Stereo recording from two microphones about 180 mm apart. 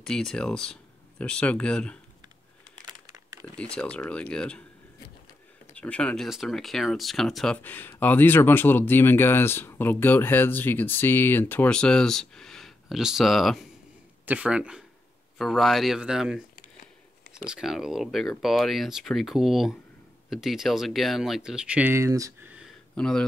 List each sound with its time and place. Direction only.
0.0 s speech: 5° left (ahead or behind)
3.5 s speech: 5° left (ahead or behind)
5.8 s speech: 5° left (ahead or behind)
17.5 s speech: centre (ahead or behind)
22.5 s a sound: centre (ahead or behind)